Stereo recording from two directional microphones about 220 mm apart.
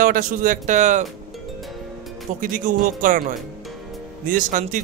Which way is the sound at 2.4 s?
35° right (ahead or behind).